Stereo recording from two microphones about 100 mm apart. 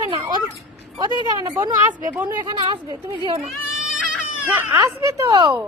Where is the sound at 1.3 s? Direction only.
40° right (ahead or behind).